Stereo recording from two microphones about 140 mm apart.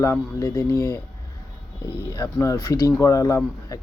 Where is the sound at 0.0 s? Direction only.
20° left (ahead or behind).